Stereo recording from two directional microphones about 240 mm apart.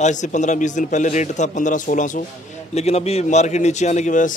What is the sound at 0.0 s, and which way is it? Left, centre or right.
A man's voice, left.